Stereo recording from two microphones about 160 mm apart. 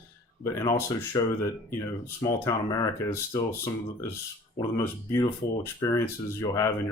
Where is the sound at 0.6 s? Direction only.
20° left (ahead or behind).